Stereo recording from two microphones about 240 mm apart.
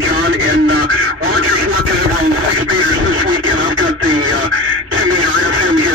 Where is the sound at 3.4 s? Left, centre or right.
Right.